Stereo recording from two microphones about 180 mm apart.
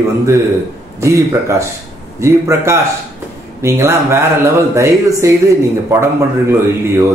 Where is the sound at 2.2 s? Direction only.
15° right (ahead or behind).